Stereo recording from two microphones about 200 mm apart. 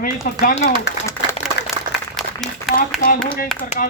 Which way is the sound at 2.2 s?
Centre (ahead or behind).